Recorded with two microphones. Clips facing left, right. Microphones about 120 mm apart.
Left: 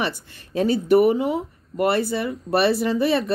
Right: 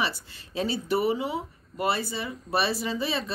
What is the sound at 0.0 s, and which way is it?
Speech, 50° left (ahead or behind).